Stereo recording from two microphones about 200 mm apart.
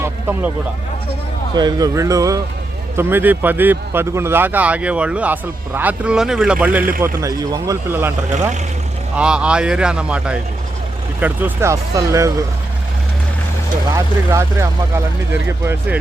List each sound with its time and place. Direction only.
0.0 s a sound: 10° right (ahead or behind)
1.5 s speech: 20° right (ahead or behind)
9.1 s speech: 5° right (ahead or behind)
13.9 s speech: 15° right (ahead or behind)